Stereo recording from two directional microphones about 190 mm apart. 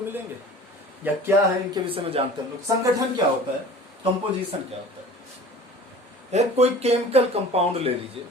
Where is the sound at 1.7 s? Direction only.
30° right (ahead or behind).